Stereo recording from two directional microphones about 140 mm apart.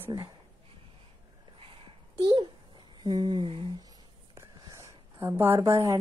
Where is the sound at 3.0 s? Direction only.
30° right (ahead or behind).